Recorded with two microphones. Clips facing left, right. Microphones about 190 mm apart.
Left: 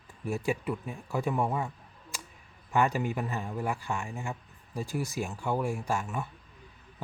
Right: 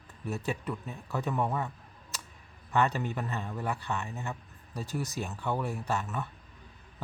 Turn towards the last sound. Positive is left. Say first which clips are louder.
# left 1 dB
turn(degrees=10)  # may be behind; listen again after turning